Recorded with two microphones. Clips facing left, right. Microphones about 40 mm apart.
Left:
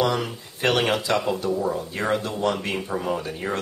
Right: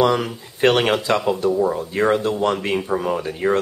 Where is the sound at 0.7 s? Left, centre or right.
Right.